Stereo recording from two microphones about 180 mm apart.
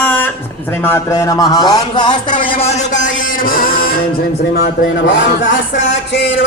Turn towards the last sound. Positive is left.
turn(degrees=90)